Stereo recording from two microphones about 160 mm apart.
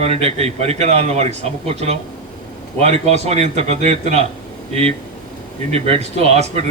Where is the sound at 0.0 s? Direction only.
40° right (ahead or behind).